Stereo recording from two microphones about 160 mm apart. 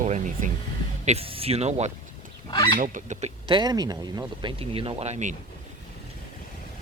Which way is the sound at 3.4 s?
25° right (ahead or behind).